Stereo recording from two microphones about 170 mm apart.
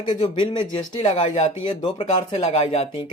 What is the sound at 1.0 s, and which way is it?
Speech, 35° left (ahead or behind).